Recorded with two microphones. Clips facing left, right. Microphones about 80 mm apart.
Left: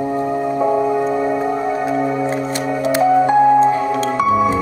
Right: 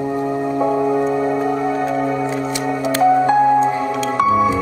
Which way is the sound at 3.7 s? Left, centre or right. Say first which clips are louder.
Left 2 dB; centre.